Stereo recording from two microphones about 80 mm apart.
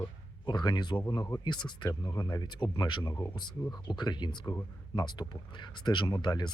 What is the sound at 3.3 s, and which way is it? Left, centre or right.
Speech, left.